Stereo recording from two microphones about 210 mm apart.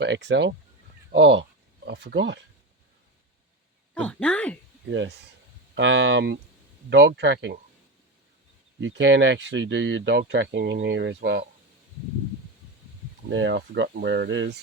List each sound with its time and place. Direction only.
0.0 s speech: 55° right (ahead or behind)
3.9 s speech: 5° left (ahead or behind)
4.9 s speech: 60° right (ahead or behind)
8.8 s speech: 60° right (ahead or behind)
13.3 s speech: 60° right (ahead or behind)